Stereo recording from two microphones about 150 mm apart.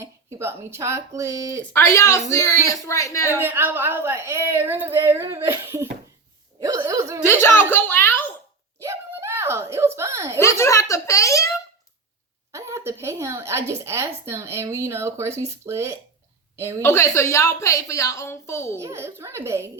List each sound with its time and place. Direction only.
0.0 s speech: 15° right (ahead or behind)
1.7 s a woman's voice: 20° left (ahead or behind)
3.3 s a woman's voice: 15° right (ahead or behind)
7.3 s speech: 15° left (ahead or behind)
8.8 s a sound: 15° right (ahead or behind)
10.4 s a woman's voice: 20° left (ahead or behind)
12.5 s a woman's voice: 20° right (ahead or behind)
16.8 s a woman's voice: 15° left (ahead or behind)
18.8 s a woman's voice: 15° right (ahead or behind)